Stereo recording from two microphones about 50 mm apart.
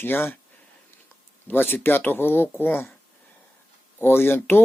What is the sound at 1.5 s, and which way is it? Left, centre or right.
Speech, left.